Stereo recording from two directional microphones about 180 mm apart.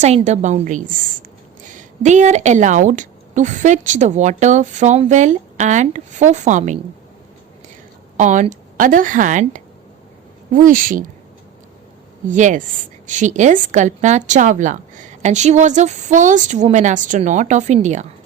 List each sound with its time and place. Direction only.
0.0 s a woman's voice: 40° right (ahead or behind)
8.1 s speech: 45° right (ahead or behind)
12.3 s a woman's voice: 45° right (ahead or behind)